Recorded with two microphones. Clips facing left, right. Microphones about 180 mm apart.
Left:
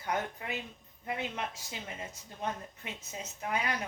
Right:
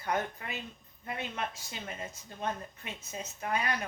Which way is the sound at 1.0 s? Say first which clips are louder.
Left 2 dB; 10° left (ahead or behind).